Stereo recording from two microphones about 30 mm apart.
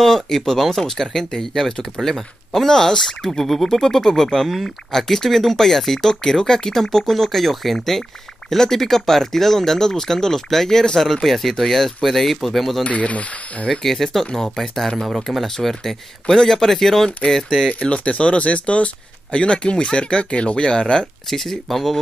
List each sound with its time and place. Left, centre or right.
0.0 s speech: centre
12.8 s speech: left
13.7 s speech: centre
17.7 s speech: left
21.3 s speech: centre